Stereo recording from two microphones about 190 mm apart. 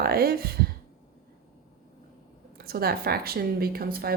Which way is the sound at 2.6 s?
55° right (ahead or behind).